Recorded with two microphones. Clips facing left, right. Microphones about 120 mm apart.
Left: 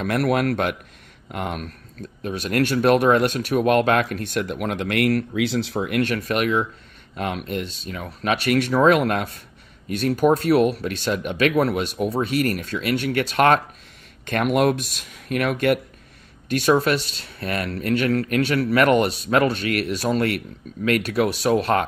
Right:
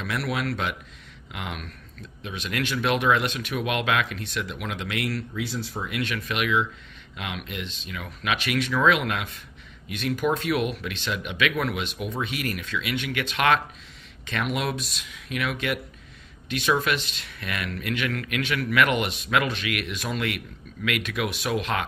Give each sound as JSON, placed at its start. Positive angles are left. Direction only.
{"t": 0.0, "sound": "speech", "side_deg": 50}